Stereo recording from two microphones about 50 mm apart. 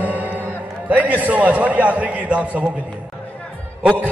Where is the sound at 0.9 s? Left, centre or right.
Right.